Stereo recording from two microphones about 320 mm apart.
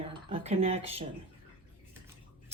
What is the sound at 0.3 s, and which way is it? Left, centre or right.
Speech, centre.